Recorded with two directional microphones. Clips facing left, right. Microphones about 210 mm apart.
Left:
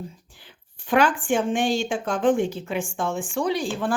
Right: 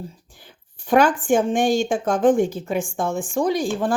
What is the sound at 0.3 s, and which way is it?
Speech, 45° right (ahead or behind).